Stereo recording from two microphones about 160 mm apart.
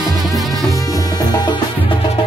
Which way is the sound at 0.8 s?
20° left (ahead or behind).